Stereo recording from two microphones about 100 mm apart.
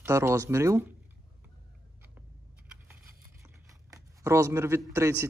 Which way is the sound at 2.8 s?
25° right (ahead or behind).